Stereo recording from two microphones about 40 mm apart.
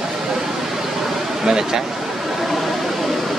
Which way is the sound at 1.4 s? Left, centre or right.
Centre.